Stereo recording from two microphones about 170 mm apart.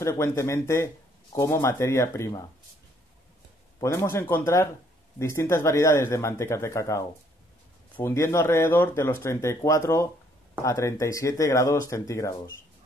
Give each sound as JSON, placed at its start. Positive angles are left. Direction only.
{"t": 0.0, "sound": "speech", "side_deg": 15}
{"t": 3.8, "sound": "speech", "side_deg": 15}